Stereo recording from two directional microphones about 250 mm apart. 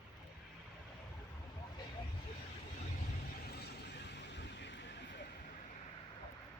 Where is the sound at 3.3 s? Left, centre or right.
Left.